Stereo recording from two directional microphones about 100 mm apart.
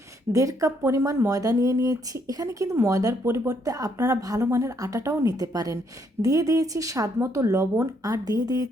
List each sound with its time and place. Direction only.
0.3 s speech: 35° right (ahead or behind)